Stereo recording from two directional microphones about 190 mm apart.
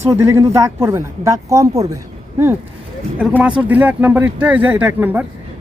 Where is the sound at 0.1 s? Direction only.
15° right (ahead or behind).